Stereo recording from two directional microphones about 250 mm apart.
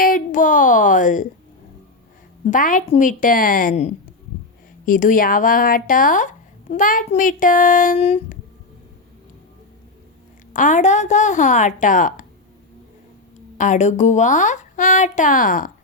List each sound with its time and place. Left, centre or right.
0.0 s speech: left
2.5 s speech: left
10.5 s speech: left
13.6 s speech: left